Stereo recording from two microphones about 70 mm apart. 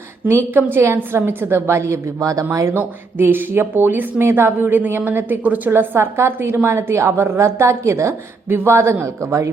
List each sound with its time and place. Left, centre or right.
0.3 s speech: right
2.7 s speech: right